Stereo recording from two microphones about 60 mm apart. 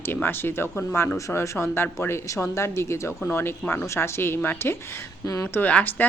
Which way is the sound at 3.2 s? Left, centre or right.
Left.